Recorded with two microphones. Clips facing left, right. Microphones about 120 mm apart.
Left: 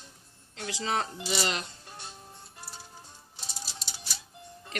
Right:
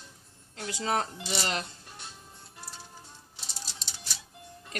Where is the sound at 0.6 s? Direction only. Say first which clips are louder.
Right 1 dB; 45° right (ahead or behind).